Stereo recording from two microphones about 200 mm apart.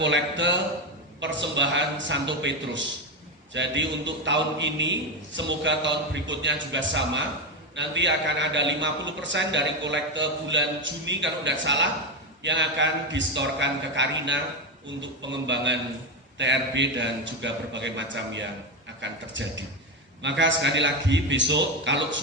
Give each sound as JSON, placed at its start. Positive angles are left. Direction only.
{"t": 0.0, "sound": "a man's voice", "side_deg": -65}